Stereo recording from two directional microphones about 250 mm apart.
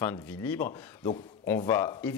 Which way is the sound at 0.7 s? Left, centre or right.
Left.